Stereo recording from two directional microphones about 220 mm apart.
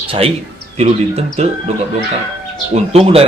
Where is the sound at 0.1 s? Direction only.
25° right (ahead or behind).